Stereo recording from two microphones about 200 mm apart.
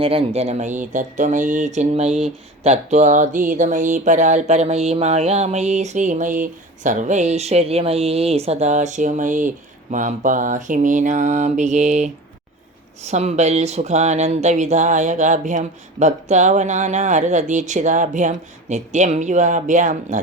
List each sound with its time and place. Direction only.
0.0 s speech: 30° right (ahead or behind)